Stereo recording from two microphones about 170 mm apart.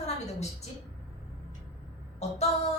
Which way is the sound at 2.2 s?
40° left (ahead or behind).